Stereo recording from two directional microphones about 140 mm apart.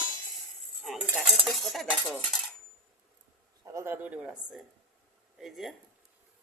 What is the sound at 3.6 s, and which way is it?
Speech, 20° right (ahead or behind).